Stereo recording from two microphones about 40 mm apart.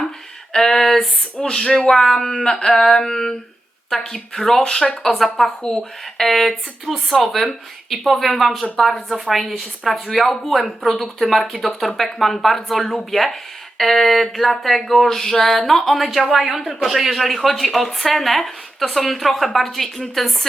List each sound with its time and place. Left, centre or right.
0.5 s a sound: centre
3.8 s speech: centre
4.6 s speech: centre
5.0 s speech: centre